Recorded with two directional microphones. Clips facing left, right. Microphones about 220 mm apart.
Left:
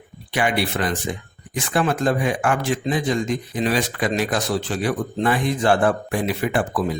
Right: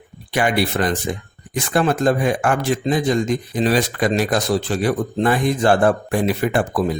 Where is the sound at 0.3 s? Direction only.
45° right (ahead or behind).